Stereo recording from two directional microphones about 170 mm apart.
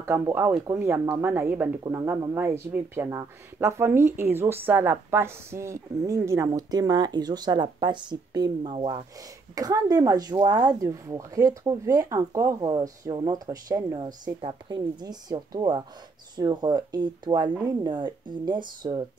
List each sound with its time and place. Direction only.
0.0 s speech: 15° right (ahead or behind)